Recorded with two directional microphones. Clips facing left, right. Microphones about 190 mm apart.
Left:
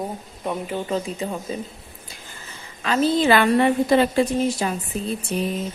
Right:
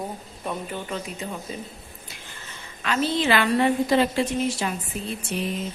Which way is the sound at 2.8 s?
40° left (ahead or behind).